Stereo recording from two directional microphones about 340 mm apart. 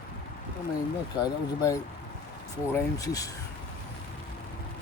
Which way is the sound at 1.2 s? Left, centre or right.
Centre.